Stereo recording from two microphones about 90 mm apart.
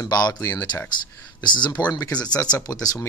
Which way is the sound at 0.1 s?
50° left (ahead or behind).